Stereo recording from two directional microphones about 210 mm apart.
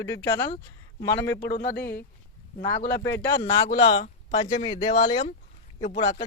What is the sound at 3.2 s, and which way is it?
A man's voice, 25° left (ahead or behind).